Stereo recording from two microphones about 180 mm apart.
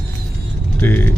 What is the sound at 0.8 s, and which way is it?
Speech, 10° left (ahead or behind).